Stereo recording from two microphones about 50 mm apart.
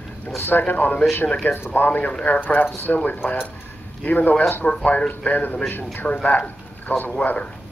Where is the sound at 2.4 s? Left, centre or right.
Left.